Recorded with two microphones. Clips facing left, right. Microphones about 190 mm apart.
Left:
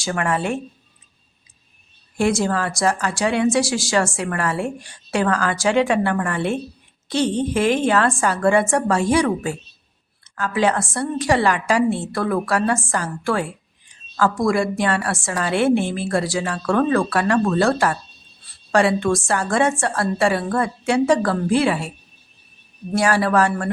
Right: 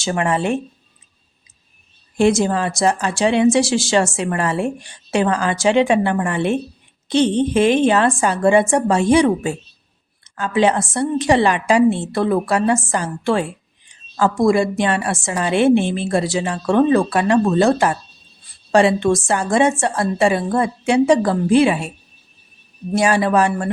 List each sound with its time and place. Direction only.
0.0 s speech: 20° right (ahead or behind)
2.1 s speech: 20° right (ahead or behind)